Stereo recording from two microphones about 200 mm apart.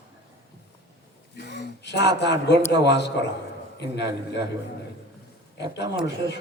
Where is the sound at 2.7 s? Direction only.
60° left (ahead or behind).